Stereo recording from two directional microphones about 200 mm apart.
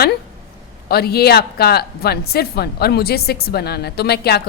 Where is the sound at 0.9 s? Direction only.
50° left (ahead or behind).